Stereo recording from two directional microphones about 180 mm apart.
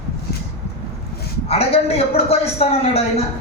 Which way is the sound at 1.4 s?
35° left (ahead or behind).